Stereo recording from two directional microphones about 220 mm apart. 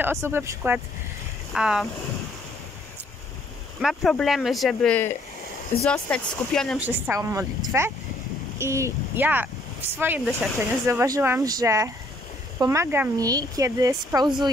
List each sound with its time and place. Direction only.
0.0 s speech: 10° right (ahead or behind)
3.8 s speech: centre (ahead or behind); by 14.3 s 15° right (ahead or behind)